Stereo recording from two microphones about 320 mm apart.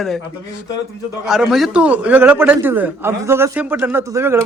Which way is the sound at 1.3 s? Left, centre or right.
Centre.